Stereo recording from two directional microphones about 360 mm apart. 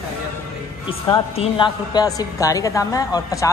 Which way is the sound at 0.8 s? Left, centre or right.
Centre.